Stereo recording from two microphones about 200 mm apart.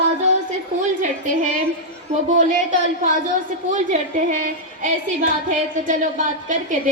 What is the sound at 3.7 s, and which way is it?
A woman's voice, 40° right (ahead or behind).